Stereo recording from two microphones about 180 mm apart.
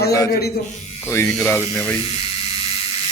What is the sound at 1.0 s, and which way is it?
Speech, 15° left (ahead or behind).